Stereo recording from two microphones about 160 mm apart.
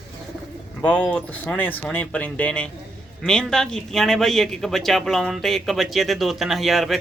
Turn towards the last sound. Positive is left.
turn(degrees=0)  # may be behind; listen again after turning